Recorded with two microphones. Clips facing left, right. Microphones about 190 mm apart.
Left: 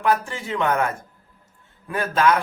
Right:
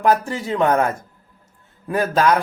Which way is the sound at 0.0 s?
40° right (ahead or behind).